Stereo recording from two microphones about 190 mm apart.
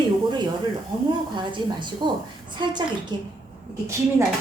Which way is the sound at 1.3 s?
25° right (ahead or behind).